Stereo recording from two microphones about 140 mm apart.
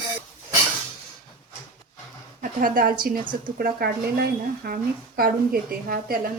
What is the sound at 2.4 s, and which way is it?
A woman's voice, 80° right.